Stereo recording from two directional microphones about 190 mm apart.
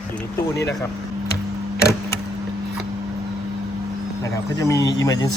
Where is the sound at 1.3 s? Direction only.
60° left (ahead or behind).